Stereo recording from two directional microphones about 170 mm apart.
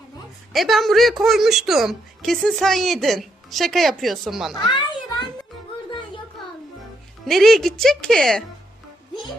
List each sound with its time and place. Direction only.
0.5 s a woman's voice: centre (ahead or behind)
4.7 s children playing: 25° left (ahead or behind)
7.3 s a woman's voice: centre (ahead or behind)